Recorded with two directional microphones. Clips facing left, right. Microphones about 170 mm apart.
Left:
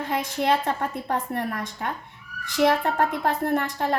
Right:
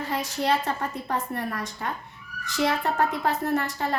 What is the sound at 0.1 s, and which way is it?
A woman's voice, 55° left (ahead or behind).